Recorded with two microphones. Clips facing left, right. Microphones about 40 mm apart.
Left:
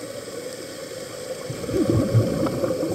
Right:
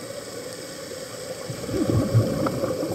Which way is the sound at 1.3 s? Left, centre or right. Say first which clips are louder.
Left 3 dB; centre.